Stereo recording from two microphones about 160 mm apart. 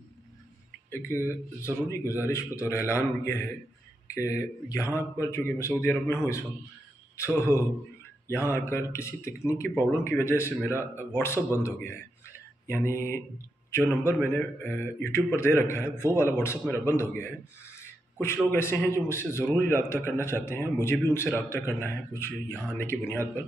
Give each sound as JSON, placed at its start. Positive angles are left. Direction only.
{"t": 0.8, "sound": "a man's voice", "side_deg": 15}